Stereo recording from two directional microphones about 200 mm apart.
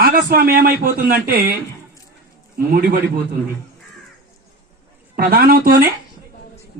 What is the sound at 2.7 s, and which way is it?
Speech, 45° right (ahead or behind).